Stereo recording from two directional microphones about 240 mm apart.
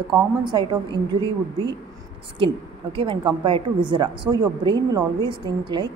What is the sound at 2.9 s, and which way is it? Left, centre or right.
A woman's voice, right.